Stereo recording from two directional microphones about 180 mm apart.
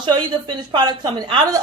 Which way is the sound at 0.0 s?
25° right (ahead or behind).